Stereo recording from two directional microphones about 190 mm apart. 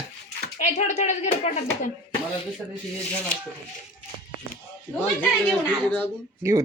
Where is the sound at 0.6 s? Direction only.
35° left (ahead or behind).